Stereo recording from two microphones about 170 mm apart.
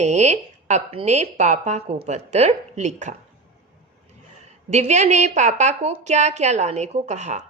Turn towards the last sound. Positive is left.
turn(degrees=-45)  # may be behind; listen again after turning